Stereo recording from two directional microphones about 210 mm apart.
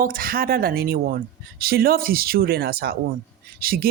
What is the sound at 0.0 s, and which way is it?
Speech, 40° right (ahead or behind).